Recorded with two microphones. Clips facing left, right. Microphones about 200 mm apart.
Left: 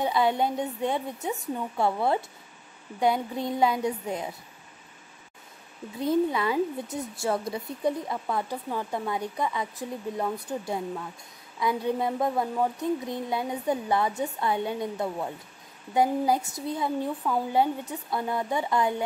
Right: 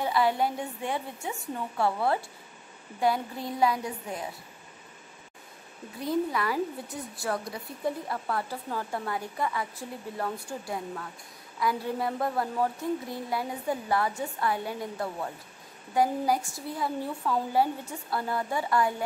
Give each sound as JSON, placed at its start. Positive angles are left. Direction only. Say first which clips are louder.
{"t": 0.0, "sound": "speech", "louder": "left 1 dB", "side_deg": 20}
{"t": 6.0, "sound": "speech", "louder": "left 4 dB", "side_deg": 25}